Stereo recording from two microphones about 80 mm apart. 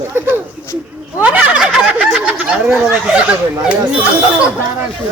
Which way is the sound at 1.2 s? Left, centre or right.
Centre.